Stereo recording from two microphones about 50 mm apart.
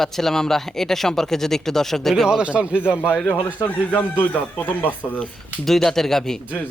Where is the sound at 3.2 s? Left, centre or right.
Left.